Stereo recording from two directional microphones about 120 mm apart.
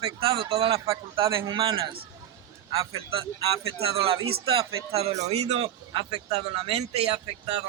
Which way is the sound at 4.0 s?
50° right (ahead or behind).